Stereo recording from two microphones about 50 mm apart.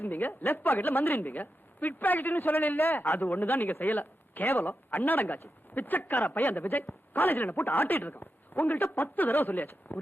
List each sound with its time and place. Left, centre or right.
0.0 s a woman's voice: left